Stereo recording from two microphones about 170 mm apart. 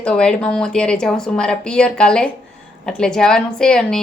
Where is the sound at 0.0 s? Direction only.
5° left (ahead or behind).